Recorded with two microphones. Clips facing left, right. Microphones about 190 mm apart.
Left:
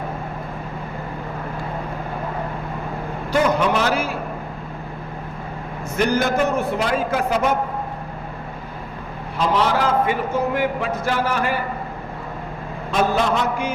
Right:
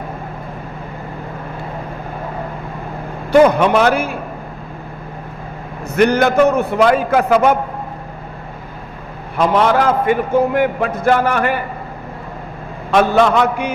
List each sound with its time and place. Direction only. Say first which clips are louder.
3.3 s a man's voice: right 8 dB; 60° right (ahead or behind)
6.0 s mantra: right 7 dB; 65° right (ahead or behind)
6.8 s a man's voice: right 7 dB; 65° right (ahead or behind)
9.4 s a man's voice: right 5 dB; 55° right (ahead or behind)
12.9 s mantra: right 7 dB; 70° right (ahead or behind)